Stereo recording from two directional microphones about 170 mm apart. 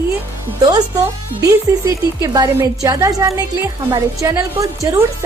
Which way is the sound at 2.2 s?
20° right (ahead or behind).